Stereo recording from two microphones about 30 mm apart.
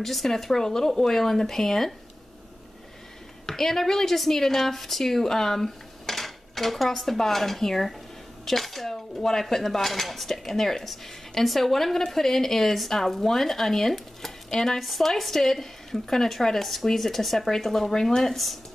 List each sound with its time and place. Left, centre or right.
0.0 s speech: centre
3.4 s a woman's voice: centre
14.8 s speech: centre